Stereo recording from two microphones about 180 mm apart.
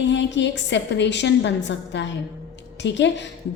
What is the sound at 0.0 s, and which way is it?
A woman's voice, 80° left.